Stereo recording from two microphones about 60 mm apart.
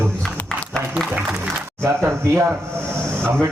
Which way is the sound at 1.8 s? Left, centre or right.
Right.